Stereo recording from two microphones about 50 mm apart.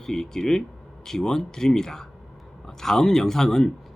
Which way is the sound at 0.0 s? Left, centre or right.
Centre.